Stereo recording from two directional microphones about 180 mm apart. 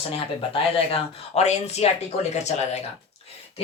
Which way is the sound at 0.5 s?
30° left (ahead or behind).